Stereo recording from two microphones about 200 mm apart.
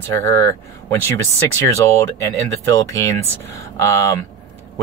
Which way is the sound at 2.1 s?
15° left (ahead or behind).